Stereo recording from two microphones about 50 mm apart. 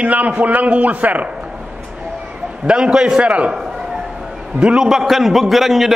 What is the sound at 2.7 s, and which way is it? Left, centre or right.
Speech, centre.